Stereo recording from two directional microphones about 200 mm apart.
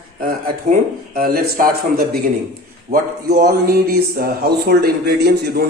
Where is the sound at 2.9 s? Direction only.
50° right (ahead or behind).